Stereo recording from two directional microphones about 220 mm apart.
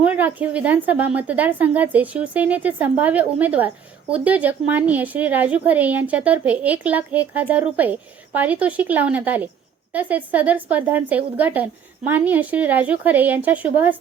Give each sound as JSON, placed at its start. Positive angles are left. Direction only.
{"t": 0.0, "sound": "a woman's voice", "side_deg": -5}